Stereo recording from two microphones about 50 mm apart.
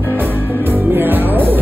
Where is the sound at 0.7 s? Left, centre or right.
Right.